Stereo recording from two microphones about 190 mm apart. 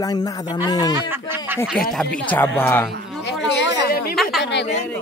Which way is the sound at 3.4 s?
70° left (ahead or behind).